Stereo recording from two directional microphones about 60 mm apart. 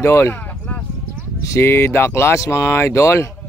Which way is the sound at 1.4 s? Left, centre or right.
Left.